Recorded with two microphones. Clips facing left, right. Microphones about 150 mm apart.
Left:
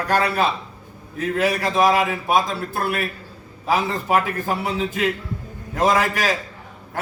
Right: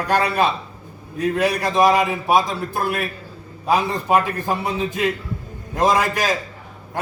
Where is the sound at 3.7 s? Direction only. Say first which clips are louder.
Right 2 dB; 15° right (ahead or behind).